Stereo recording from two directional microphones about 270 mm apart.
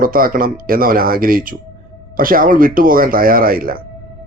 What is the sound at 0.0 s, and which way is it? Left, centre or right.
Speech, right.